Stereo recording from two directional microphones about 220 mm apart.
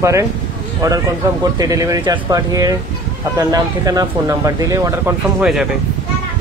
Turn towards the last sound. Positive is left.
turn(degrees=-5)  # may be behind; listen again after turning